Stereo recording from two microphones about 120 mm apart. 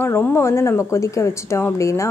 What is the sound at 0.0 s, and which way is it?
A woman's voice, 20° left (ahead or behind).